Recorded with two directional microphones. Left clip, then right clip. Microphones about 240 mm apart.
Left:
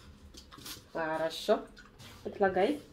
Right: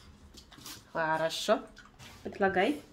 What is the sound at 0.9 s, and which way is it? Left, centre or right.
Speech, right.